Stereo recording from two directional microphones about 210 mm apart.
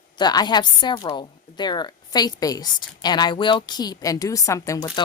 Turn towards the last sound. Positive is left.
turn(degrees=15)  # may be behind; listen again after turning